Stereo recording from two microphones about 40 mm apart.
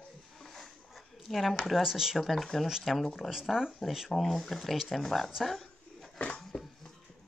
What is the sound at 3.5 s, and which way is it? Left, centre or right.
Speech, centre.